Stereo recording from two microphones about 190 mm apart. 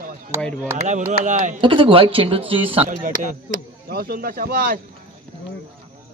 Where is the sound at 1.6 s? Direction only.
25° right (ahead or behind).